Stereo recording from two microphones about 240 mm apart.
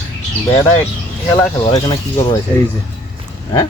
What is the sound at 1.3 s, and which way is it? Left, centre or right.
Speech, centre.